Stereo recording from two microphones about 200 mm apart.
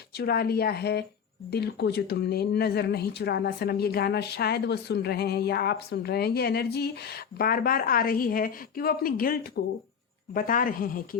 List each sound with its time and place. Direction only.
0.2 s speech: 50° left (ahead or behind)